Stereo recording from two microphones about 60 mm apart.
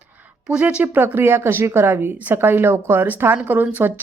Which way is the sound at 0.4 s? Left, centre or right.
Centre.